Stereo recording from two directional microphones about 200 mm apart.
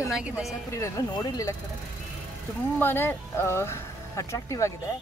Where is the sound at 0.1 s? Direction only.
Centre (ahead or behind).